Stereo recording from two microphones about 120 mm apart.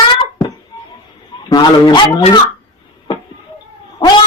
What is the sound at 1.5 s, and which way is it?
Speech, 35° left (ahead or behind).